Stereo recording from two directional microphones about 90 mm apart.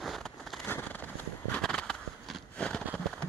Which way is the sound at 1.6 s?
5° left (ahead or behind).